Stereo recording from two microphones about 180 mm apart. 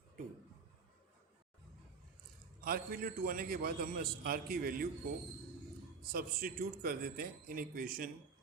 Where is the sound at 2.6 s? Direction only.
55° right (ahead or behind).